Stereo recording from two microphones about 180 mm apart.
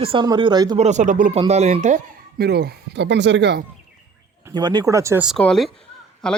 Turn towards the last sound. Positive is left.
turn(degrees=5)  # may be behind; listen again after turning